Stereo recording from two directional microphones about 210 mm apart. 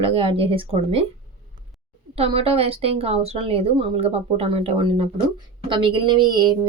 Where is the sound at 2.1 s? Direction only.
30° right (ahead or behind).